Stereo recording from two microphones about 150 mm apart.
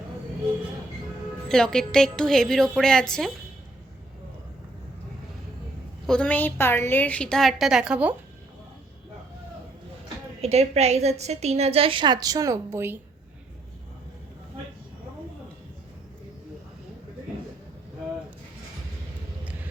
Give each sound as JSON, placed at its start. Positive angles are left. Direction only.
{"t": 1.5, "sound": "a woman's voice", "side_deg": 5}
{"t": 6.1, "sound": "a woman's voice", "side_deg": 10}
{"t": 10.4, "sound": "a woman's voice", "side_deg": -45}